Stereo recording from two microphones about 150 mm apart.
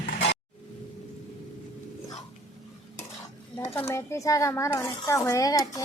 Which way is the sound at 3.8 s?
15° left (ahead or behind).